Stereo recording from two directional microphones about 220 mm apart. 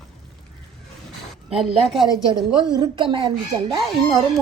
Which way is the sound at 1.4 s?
Centre (ahead or behind).